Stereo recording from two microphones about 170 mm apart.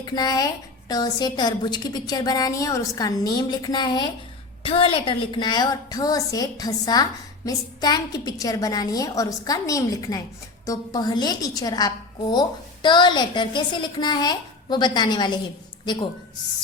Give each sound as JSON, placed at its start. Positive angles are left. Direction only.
{"t": 0.0, "sound": "a woman's voice", "side_deg": 25}